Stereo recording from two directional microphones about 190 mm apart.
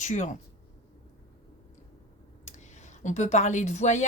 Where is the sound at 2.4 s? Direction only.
40° left (ahead or behind).